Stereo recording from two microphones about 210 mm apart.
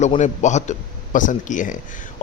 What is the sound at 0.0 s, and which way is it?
A man's voice, 35° left (ahead or behind).